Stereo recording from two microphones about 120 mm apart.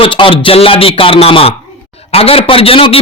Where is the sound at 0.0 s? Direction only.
50° left (ahead or behind).